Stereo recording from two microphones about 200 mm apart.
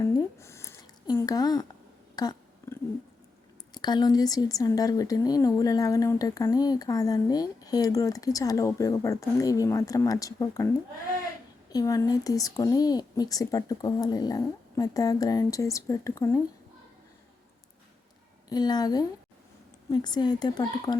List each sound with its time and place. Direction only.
0.0 s a sound: 15° left (ahead or behind)
3.8 s speech: 20° left (ahead or behind)
11.7 s speech: 20° left (ahead or behind)
18.4 s a woman's voice: 20° left (ahead or behind)